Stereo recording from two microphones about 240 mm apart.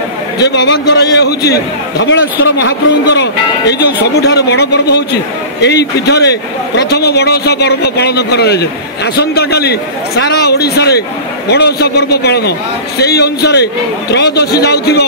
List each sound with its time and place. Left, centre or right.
0.4 s a man's voice: left